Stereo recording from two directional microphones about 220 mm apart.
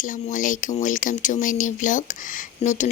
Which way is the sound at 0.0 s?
35° left (ahead or behind).